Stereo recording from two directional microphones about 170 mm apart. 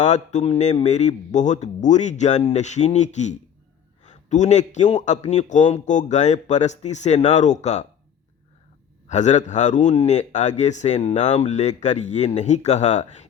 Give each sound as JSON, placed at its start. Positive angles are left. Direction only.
{"t": 0.0, "sound": "a man's voice", "side_deg": 45}
{"t": 9.0, "sound": "a man's voice", "side_deg": 45}